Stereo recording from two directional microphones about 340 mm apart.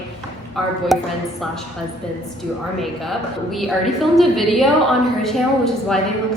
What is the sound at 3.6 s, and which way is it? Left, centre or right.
A woman's voice, centre.